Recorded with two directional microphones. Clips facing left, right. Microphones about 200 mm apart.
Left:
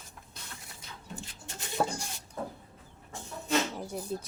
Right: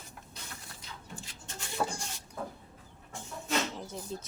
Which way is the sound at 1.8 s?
35° left (ahead or behind).